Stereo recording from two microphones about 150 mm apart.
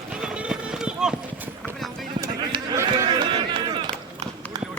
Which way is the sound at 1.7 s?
Centre (ahead or behind).